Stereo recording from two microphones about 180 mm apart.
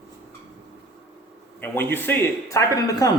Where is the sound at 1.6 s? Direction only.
10° left (ahead or behind).